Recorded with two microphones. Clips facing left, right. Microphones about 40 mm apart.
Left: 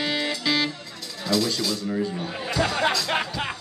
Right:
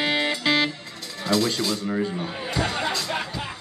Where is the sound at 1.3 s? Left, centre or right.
Right.